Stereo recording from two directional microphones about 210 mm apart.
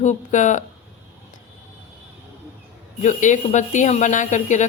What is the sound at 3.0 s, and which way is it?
Speech, 35° left (ahead or behind).